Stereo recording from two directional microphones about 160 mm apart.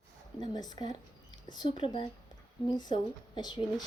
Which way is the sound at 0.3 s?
25° left (ahead or behind).